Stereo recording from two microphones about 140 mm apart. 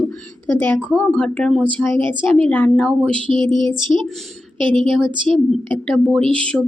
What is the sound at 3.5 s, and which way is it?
Child singing, 35° right (ahead or behind).